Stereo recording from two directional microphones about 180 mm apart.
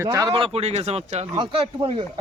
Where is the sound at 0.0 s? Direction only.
20° right (ahead or behind).